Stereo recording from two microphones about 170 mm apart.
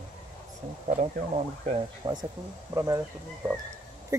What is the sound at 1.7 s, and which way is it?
Speech, 25° right (ahead or behind).